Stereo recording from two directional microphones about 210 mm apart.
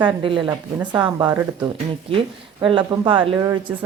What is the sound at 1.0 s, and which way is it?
Speech, 20° right (ahead or behind).